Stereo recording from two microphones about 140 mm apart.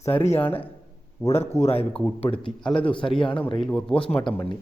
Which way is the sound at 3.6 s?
10° left (ahead or behind).